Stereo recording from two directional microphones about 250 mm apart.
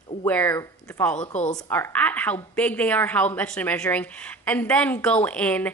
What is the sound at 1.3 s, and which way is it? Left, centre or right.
Speech, left.